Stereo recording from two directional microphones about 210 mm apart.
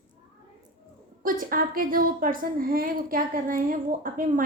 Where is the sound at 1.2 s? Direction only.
40° right (ahead or behind).